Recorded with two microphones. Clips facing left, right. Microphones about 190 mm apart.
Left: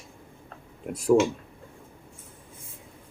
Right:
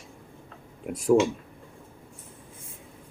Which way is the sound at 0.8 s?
Centre (ahead or behind).